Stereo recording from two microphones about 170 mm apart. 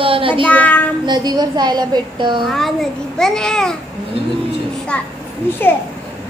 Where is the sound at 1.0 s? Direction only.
25° right (ahead or behind).